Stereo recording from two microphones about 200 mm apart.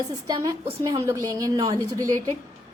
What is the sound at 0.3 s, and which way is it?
A woman's voice, 20° right (ahead or behind).